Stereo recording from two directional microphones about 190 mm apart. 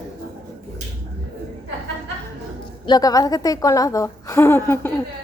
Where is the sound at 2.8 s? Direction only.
20° left (ahead or behind).